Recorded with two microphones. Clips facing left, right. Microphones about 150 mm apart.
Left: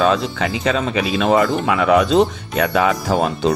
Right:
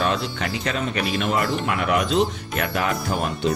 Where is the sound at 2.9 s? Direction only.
90° left.